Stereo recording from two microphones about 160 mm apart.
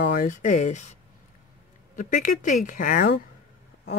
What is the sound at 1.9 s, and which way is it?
Speech, 55° left (ahead or behind).